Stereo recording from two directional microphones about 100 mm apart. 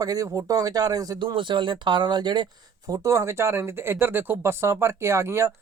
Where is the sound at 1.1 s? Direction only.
55° right (ahead or behind).